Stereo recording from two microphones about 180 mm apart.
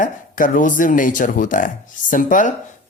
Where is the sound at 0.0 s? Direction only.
45° left (ahead or behind).